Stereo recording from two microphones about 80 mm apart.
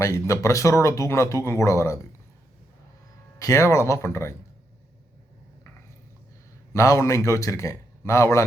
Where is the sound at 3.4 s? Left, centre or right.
Left.